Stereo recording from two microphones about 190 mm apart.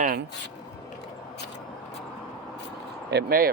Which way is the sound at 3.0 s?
55° right (ahead or behind).